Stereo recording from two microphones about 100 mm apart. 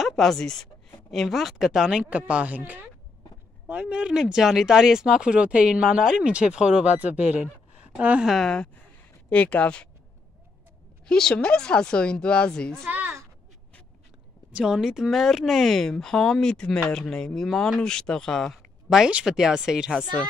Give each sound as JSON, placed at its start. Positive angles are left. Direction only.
{"t": 0.0, "sound": "speech", "side_deg": 0}
{"t": 8.3, "sound": "a woman's voice", "side_deg": 5}
{"t": 11.1, "sound": "a woman's voice", "side_deg": 5}
{"t": 12.8, "sound": "a sound", "side_deg": -20}
{"t": 14.5, "sound": "speech", "side_deg": -5}